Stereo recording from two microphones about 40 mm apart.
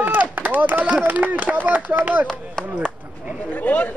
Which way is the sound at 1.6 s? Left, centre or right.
Right.